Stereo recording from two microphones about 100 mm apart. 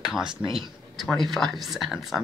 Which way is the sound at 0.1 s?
5° right (ahead or behind).